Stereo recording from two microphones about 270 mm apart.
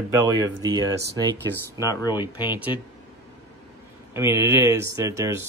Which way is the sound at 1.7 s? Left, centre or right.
Centre.